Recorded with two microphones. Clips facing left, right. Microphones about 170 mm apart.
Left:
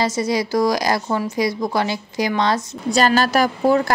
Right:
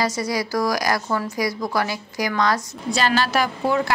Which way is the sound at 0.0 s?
25° left (ahead or behind).